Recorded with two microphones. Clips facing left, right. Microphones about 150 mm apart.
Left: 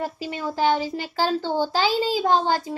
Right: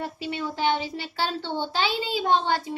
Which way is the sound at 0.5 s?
40° left (ahead or behind).